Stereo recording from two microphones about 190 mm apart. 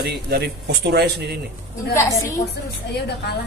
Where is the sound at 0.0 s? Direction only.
60° right (ahead or behind).